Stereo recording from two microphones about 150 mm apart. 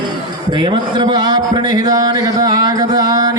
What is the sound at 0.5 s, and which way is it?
A man's voice, 30° right (ahead or behind).